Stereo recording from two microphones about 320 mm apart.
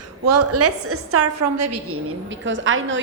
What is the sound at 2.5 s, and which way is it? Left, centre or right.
Speech, right.